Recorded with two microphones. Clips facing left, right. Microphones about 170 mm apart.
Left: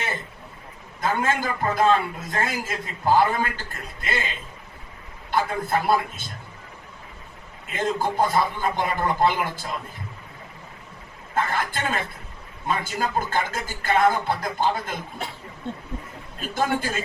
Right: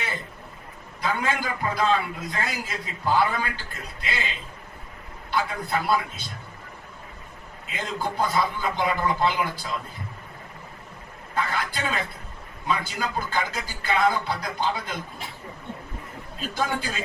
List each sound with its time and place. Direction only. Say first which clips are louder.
1.0 s a man's voice: left 3 dB; 45° left (ahead or behind)
7.7 s a man's voice: left 5 dB; 50° left (ahead or behind)
11.3 s a man's voice: left 2 dB; 50° left (ahead or behind)
16.4 s a man's voice: left 3 dB; 50° left (ahead or behind)